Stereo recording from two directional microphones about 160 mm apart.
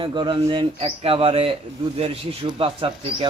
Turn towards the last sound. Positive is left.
turn(degrees=-35)  # may be behind; listen again after turning